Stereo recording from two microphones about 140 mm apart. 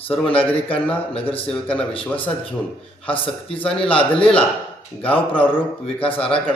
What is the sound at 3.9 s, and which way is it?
Speech, 40° left (ahead or behind).